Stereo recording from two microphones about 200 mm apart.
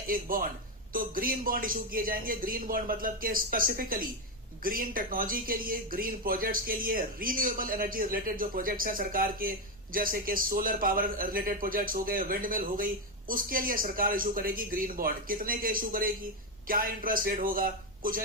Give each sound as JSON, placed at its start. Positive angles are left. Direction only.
{"t": 0.1, "sound": "speech", "side_deg": -45}